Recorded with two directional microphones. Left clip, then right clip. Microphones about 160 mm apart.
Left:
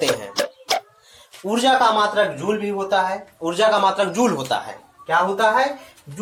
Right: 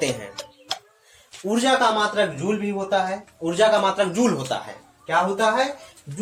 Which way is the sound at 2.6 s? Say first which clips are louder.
Left 2 dB; 15° right (ahead or behind).